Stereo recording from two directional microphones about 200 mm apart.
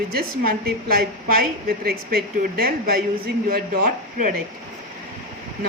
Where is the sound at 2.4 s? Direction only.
50° right (ahead or behind).